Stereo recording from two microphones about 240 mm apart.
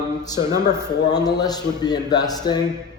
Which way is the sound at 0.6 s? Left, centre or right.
Centre.